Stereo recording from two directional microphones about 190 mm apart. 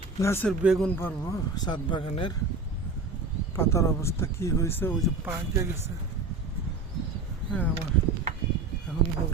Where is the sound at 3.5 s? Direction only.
15° left (ahead or behind).